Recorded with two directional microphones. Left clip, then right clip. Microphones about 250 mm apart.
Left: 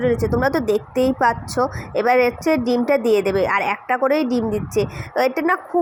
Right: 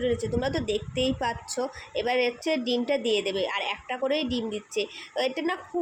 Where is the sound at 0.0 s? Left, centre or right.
Centre.